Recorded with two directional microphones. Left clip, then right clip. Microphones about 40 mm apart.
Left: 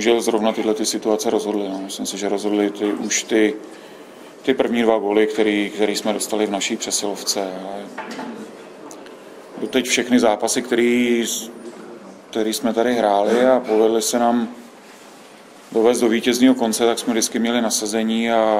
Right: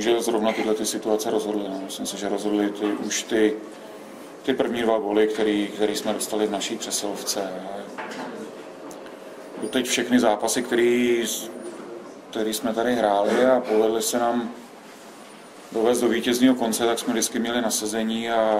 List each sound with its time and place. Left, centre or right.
0.0 s a man's voice: left
9.7 s a man's voice: centre
15.7 s a man's voice: centre